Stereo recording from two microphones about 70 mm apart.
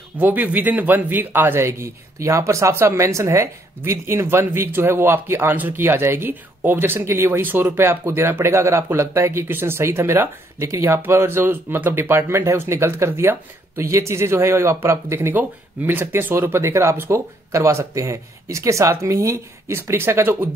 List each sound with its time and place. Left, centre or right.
0.2 s speech: right
15.3 s speech: right
17.5 s speech: right